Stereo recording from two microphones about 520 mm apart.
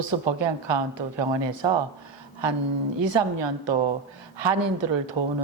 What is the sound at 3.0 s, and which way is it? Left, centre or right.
A woman's voice, right.